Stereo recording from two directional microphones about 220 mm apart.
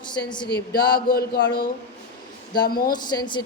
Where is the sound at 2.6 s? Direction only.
40° left (ahead or behind).